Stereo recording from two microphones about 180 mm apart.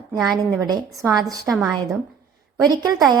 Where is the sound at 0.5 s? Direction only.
20° right (ahead or behind).